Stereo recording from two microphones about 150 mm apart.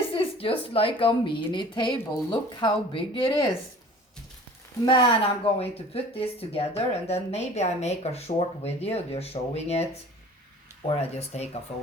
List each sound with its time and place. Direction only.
0.1 s a woman's voice: 40° left (ahead or behind)
4.9 s speech: 40° left (ahead or behind)